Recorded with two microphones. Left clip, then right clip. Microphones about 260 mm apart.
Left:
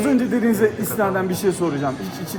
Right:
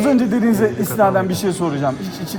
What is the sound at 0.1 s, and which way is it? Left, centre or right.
Speech, centre.